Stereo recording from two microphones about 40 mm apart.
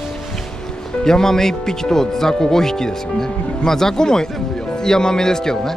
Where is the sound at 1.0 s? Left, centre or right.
Centre.